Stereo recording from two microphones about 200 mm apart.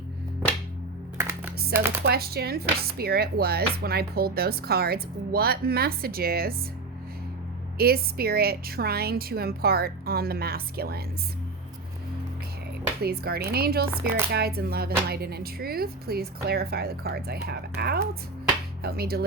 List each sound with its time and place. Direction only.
1.7 s speech: 10° right (ahead or behind)
2.0 s speech: 50° right (ahead or behind)
7.8 s speech: 50° right (ahead or behind)
13.0 s speech: 50° right (ahead or behind)